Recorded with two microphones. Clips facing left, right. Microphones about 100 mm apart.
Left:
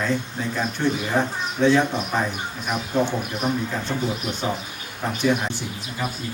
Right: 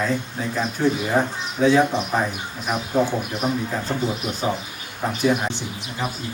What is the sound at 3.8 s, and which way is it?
Speech, 40° right (ahead or behind).